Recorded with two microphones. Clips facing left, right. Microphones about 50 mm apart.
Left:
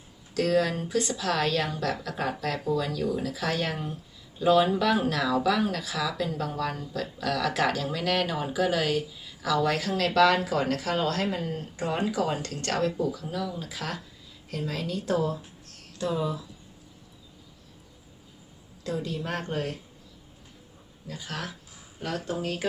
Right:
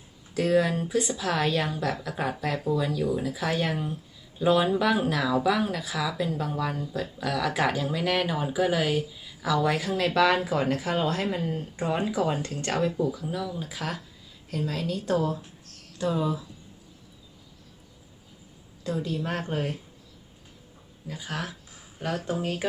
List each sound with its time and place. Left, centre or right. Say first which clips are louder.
0.3 s speech: right 1 dB; centre
11.3 s speech: right 1 dB; centre
18.8 s speech: right 2 dB; centre
21.1 s speech: right 2 dB; centre